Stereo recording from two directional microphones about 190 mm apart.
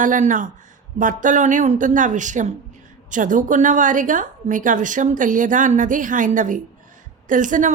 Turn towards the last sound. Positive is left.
turn(degrees=-40)  # may be behind; listen again after turning